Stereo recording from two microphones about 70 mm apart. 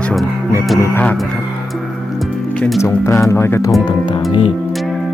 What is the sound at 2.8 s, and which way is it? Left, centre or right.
Speech, left.